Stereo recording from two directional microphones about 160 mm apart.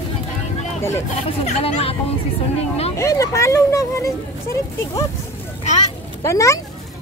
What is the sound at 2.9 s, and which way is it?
A woman's voice, 20° left (ahead or behind).